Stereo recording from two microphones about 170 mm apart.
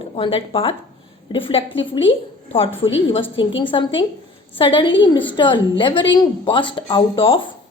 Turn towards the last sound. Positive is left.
turn(degrees=30)  # may be behind; listen again after turning